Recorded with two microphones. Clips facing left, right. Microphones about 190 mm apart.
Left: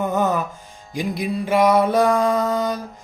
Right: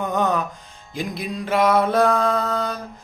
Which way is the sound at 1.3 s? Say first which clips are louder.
Left 2 dB; 10° left (ahead or behind).